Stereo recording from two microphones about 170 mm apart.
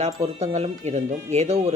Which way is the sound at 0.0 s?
40° right (ahead or behind).